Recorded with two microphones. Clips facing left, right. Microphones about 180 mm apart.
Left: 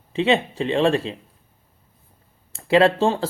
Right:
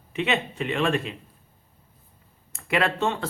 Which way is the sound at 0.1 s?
30° left (ahead or behind).